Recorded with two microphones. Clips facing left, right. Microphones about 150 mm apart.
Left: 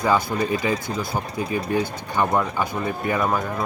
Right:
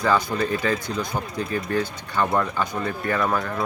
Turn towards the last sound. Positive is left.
turn(degrees=15)  # may be behind; listen again after turning